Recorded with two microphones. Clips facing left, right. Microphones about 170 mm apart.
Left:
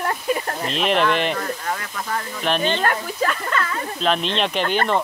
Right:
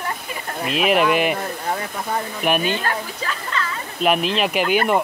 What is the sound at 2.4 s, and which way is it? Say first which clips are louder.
Speech: right 1 dB; 10° right (ahead or behind).